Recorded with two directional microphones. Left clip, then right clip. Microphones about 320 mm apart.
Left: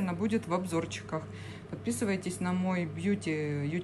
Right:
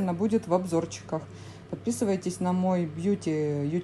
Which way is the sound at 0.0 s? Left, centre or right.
Centre.